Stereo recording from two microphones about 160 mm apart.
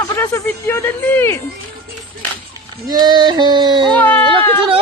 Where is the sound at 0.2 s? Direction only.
15° left (ahead or behind).